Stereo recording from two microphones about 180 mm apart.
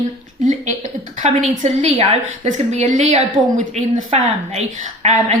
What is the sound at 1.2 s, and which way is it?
A woman's voice, 40° right (ahead or behind).